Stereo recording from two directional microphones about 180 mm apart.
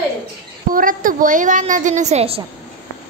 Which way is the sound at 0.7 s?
50° right (ahead or behind).